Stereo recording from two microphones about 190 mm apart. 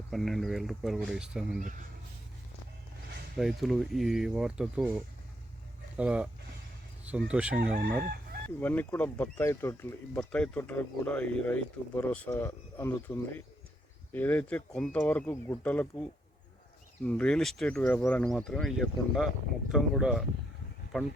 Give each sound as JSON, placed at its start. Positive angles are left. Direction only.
{"t": 0.1, "sound": "speech", "side_deg": 0}
{"t": 3.3, "sound": "speech", "side_deg": 0}
{"t": 8.1, "sound": "chicken", "side_deg": -55}
{"t": 8.6, "sound": "speech", "side_deg": 10}